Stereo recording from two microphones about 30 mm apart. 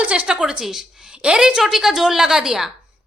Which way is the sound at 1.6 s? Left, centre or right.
Centre.